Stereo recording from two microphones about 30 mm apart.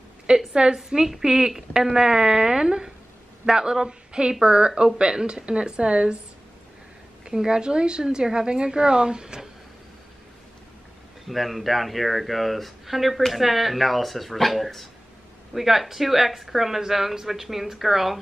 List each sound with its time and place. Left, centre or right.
0.3 s a woman's voice: right
0.8 s a woman's voice: centre; by 6.1 s right
7.2 s a woman's voice: right
11.2 s speech: centre